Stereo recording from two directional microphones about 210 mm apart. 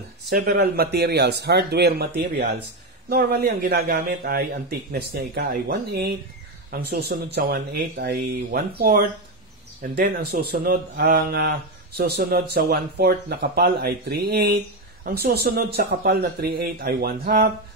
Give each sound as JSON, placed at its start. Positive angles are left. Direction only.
{"t": 0.3, "sound": "speech", "side_deg": -50}